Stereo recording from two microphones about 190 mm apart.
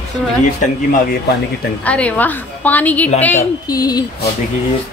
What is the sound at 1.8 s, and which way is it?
Speech, 5° left (ahead or behind).